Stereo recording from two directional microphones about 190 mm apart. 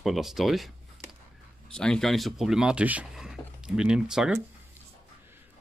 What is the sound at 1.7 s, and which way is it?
Speech, 5° left (ahead or behind).